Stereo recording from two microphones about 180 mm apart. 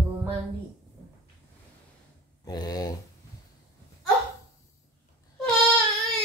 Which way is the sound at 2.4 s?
20° left (ahead or behind).